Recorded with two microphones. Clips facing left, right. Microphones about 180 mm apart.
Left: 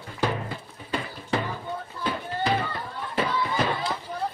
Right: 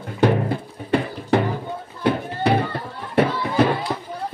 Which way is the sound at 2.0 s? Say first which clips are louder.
Right 7 dB; 65° right (ahead or behind).